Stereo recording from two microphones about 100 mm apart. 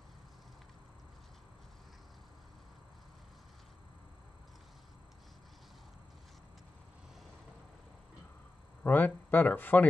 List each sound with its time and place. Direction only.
8.8 s speech: 20° left (ahead or behind)